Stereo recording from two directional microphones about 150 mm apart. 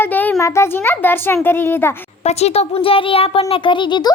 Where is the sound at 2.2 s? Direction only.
45° left (ahead or behind).